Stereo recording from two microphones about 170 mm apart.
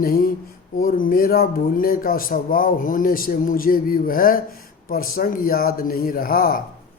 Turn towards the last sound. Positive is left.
turn(degrees=60)  # may be behind; listen again after turning